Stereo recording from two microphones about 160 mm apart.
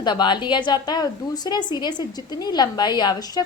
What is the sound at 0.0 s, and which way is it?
A woman's voice, 25° left (ahead or behind).